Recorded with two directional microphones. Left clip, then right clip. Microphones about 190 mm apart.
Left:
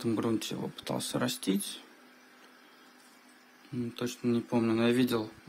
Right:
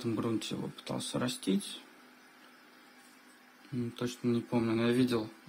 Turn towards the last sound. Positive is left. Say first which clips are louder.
# left 2 dB
turn(degrees=15)  # may be behind; listen again after turning